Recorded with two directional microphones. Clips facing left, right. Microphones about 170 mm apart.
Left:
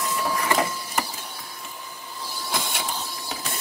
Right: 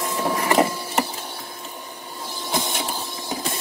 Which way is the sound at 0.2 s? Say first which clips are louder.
Right 6 dB; 25° right (ahead or behind).